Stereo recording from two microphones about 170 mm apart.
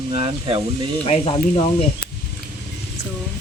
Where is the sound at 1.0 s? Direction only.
35° left (ahead or behind).